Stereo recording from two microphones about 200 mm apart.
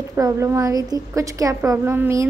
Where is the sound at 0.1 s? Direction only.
15° right (ahead or behind).